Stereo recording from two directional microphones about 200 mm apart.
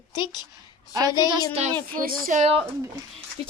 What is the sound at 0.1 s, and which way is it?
Speech, 20° left (ahead or behind).